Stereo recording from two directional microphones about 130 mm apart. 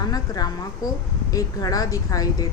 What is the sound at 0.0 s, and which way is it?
A woman's voice, 30° left (ahead or behind).